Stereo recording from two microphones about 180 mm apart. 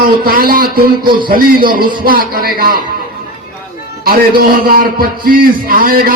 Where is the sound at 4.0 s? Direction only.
55° right (ahead or behind).